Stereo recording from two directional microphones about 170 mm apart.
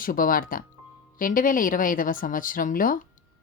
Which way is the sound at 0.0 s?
55° left (ahead or behind).